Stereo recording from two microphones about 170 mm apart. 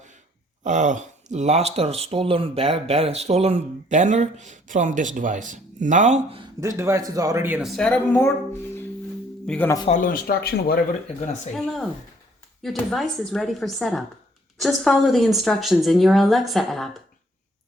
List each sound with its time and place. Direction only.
0.6 s speech: 45° right (ahead or behind)
6.6 s speech: 15° right (ahead or behind)
7.7 s a woman's voice: 5° left (ahead or behind)
9.5 s speech: 10° left (ahead or behind)
9.9 s speech: 55° left (ahead or behind)
11.5 s a woman's voice: centre (ahead or behind)